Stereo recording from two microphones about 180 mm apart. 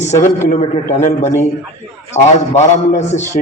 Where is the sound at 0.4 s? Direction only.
40° left (ahead or behind).